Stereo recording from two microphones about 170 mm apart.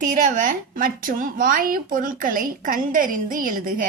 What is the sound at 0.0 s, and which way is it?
A woman's voice, 50° right (ahead or behind).